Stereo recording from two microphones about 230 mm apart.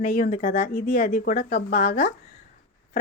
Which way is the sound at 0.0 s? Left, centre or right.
Left.